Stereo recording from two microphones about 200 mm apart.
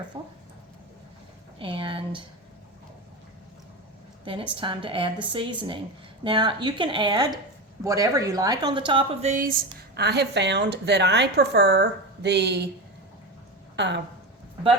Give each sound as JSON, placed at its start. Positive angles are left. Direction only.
{"t": 0.1, "sound": "a sound", "side_deg": -25}
{"t": 1.5, "sound": "speech", "side_deg": -25}
{"t": 4.5, "sound": "speech", "side_deg": -25}
{"t": 9.3, "sound": "speech", "side_deg": -45}
{"t": 9.9, "sound": "speech", "side_deg": -55}
{"t": 13.7, "sound": "speech", "side_deg": -60}